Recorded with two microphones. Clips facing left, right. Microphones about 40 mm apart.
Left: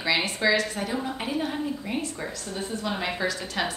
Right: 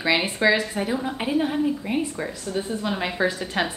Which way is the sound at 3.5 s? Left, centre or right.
Right.